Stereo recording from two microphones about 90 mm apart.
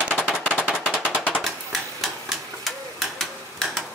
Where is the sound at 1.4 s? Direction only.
Centre (ahead or behind).